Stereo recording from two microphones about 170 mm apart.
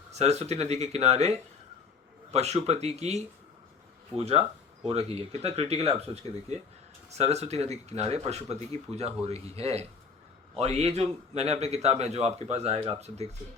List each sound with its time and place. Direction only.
0.1 s a man's voice: 40° right (ahead or behind)
2.3 s a man's voice: 40° right (ahead or behind)